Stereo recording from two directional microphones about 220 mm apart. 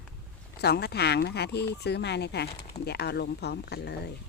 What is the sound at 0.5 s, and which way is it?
Speech, 45° left (ahead or behind).